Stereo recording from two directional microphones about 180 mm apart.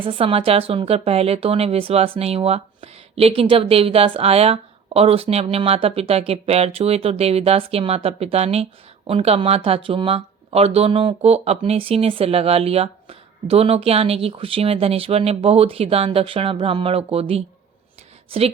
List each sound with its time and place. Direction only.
0.0 s a woman's voice: 30° right (ahead or behind)